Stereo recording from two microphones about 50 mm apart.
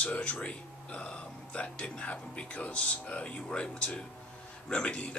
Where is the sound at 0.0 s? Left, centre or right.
Left.